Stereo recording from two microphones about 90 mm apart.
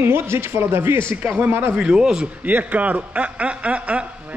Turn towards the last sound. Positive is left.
turn(degrees=-15)  # may be behind; listen again after turning